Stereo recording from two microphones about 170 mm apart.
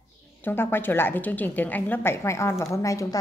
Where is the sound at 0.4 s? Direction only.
10° left (ahead or behind).